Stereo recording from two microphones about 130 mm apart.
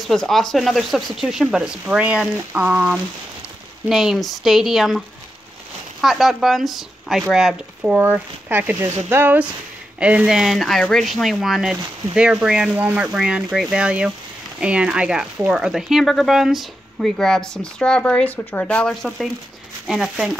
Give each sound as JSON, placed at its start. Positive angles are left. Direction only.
{"t": 0.0, "sound": "speech", "side_deg": 0}